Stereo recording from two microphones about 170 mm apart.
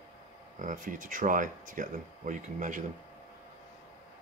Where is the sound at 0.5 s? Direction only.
50° right (ahead or behind).